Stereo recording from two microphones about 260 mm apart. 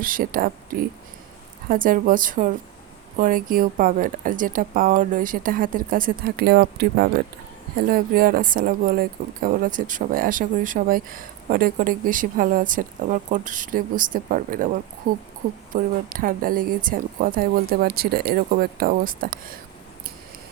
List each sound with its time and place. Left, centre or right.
0.0 s speech: right